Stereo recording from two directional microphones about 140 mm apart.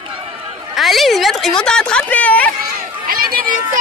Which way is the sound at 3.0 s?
90° right.